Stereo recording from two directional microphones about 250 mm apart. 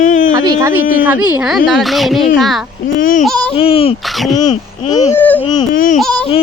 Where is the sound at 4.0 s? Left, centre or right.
Centre.